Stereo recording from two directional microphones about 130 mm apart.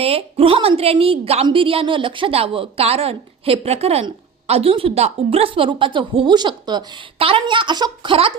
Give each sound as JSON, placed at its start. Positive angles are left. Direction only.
{"t": 0.0, "sound": "speech", "side_deg": -50}